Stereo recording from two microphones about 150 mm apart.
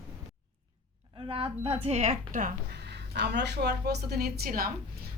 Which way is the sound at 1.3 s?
40° right (ahead or behind).